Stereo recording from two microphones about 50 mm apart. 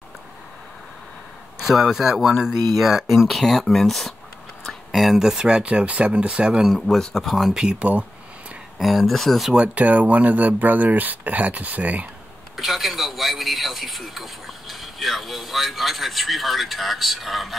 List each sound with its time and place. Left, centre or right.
1.6 s a man's voice: centre
5.6 s speech: right
6.6 s a man's voice: centre
7.0 s speech: centre
7.3 s speech: centre
7.6 s speech: right
8.7 s a man's voice: centre
9.5 s speech: right
12.5 s a man's voice: centre